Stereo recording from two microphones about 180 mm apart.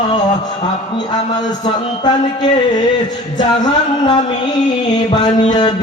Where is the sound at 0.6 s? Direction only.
25° left (ahead or behind).